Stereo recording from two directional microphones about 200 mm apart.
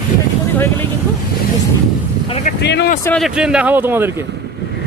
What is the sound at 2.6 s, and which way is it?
Speech, 60° left (ahead or behind).